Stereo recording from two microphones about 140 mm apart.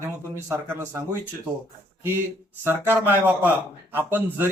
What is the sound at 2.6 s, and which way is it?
A man's voice, 15° right (ahead or behind).